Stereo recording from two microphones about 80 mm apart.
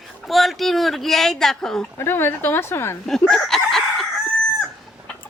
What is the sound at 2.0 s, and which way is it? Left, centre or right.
Speech, left.